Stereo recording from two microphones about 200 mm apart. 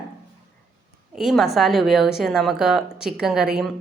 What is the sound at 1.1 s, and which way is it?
A woman's voice, centre (ahead or behind).